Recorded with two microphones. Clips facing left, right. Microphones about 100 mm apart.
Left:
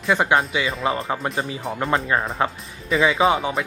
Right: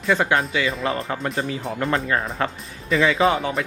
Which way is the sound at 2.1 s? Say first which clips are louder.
Left 1 dB; 20° left (ahead or behind).